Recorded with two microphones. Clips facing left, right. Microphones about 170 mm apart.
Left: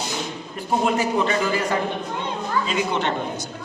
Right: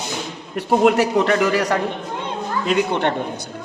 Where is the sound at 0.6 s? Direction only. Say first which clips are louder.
Right 6 dB; 75° right (ahead or behind).